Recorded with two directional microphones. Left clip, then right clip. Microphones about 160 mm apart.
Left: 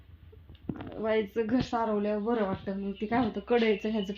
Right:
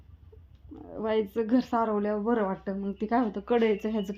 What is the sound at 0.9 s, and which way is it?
A woman's voice, 15° right (ahead or behind).